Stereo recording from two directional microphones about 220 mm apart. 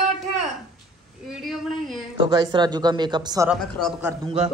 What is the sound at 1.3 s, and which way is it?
Speech, centre (ahead or behind).